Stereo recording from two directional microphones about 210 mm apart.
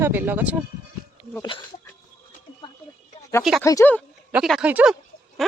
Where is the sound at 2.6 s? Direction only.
20° left (ahead or behind).